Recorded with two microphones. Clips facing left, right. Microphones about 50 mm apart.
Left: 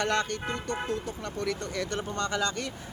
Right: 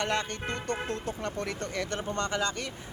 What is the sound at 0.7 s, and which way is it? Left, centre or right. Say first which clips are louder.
Speech: even; right.